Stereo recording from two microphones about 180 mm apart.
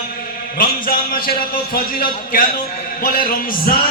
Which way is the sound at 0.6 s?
55° left (ahead or behind).